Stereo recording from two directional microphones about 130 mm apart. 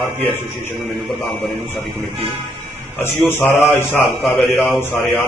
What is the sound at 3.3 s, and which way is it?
Mantra, 20° left (ahead or behind).